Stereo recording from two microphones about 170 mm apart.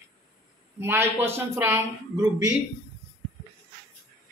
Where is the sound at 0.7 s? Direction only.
15° right (ahead or behind).